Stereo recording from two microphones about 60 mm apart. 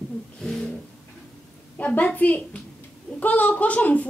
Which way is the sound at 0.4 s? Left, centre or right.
Centre.